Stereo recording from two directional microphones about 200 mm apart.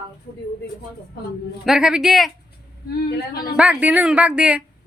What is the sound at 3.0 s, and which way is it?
Speech, 50° left (ahead or behind).